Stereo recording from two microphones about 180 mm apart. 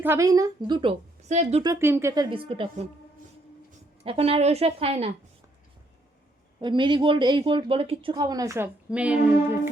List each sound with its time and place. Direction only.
0.0 s speech: 15° right (ahead or behind)
1.3 s a woman's voice: 40° right (ahead or behind)
1.6 s speech: 15° right (ahead or behind)
2.3 s speech: 30° right (ahead or behind)
4.0 s a woman's voice: 30° right (ahead or behind)
6.6 s speech: 25° right (ahead or behind); by 9.1 s 5° right (ahead or behind)